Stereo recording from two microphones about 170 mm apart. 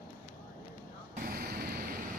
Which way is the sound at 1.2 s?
65° right (ahead or behind).